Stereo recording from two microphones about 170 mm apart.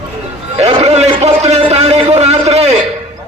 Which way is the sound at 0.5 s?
40° right (ahead or behind).